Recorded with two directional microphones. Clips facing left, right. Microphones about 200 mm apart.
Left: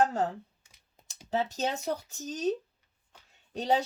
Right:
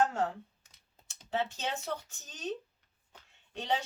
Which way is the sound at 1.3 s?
40° left (ahead or behind).